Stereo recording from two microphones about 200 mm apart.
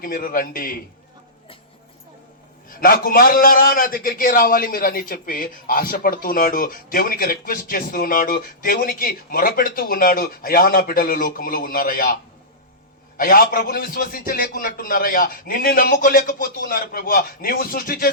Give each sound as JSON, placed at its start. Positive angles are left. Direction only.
{"t": 0.0, "sound": "a man's voice", "side_deg": 45}
{"t": 2.6, "sound": "a man's voice", "side_deg": 45}
{"t": 13.1, "sound": "a man's voice", "side_deg": 45}